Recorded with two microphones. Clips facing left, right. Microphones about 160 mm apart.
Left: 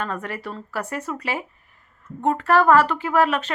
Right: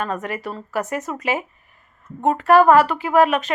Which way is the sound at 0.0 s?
15° right (ahead or behind).